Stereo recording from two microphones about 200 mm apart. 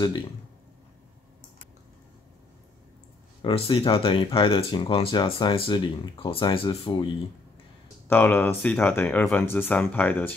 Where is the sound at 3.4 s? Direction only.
25° left (ahead or behind).